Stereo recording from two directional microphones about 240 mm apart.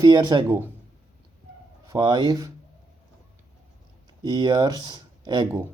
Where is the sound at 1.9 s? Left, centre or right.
Centre.